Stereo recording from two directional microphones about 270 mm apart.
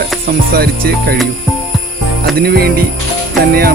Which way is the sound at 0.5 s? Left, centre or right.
Right.